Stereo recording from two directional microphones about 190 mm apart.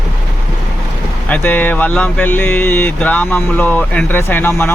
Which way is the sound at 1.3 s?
10° left (ahead or behind).